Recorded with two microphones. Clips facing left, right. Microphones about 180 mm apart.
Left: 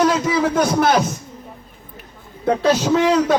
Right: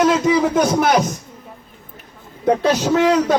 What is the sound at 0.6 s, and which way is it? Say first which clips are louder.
Speech: even; centre (ahead or behind).